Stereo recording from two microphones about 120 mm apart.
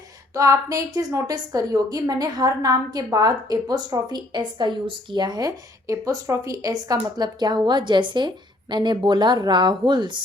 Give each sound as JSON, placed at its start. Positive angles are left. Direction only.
{"t": 0.3, "sound": "a woman's voice", "side_deg": -25}